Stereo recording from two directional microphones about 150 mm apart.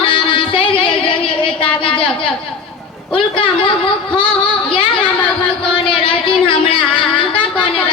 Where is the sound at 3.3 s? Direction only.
35° left (ahead or behind).